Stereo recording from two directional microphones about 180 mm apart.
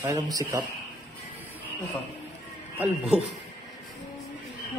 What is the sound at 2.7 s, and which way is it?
Speech, 10° right (ahead or behind).